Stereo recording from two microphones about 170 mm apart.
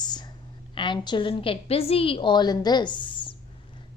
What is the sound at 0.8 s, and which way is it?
A woman's voice, 25° left (ahead or behind).